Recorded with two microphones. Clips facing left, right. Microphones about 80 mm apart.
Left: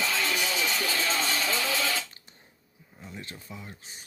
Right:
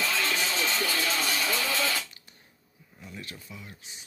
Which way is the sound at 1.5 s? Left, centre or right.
Left.